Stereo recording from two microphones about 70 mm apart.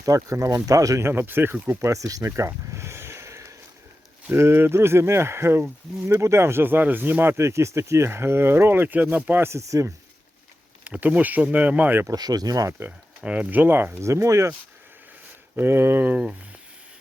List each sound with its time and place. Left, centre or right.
0.0 s speech: right
1.0 s speech: right
1.8 s a sound: right
4.3 s speech: right
7.3 s speech: right
9.4 s speech: right
10.8 s speech: centre
12.1 s speech: right
13.2 s speech: centre
14.0 s speech: right
15.5 s speech: right